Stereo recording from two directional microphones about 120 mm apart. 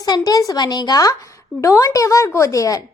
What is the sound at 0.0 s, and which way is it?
A woman's voice, 30° left (ahead or behind).